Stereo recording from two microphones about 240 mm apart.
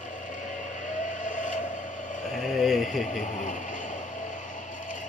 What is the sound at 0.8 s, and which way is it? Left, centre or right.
Vehicle, left.